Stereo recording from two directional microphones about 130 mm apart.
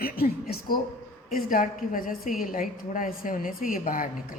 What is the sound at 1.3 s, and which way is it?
A woman's voice, 90° left.